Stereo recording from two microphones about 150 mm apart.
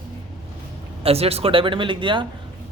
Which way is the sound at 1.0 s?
40° right (ahead or behind).